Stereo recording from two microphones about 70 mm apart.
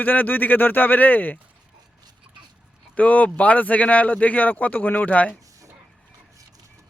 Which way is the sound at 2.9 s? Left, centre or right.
Left.